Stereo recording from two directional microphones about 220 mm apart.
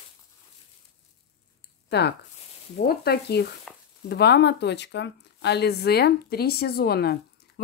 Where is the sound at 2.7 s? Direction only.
45° left (ahead or behind).